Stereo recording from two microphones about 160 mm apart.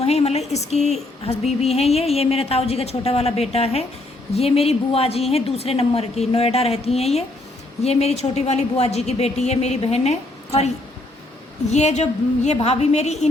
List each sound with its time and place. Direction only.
0.0 s a woman's voice: 40° left (ahead or behind)
11.7 s a woman's voice: 45° left (ahead or behind)